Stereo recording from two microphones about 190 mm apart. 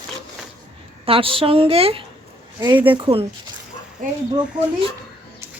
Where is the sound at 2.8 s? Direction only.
25° right (ahead or behind).